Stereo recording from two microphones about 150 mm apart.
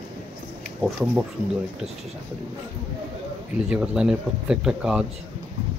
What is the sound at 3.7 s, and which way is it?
Speech, 5° right (ahead or behind).